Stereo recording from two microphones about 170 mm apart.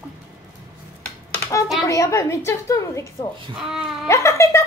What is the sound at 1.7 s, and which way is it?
A woman's voice, 20° left (ahead or behind).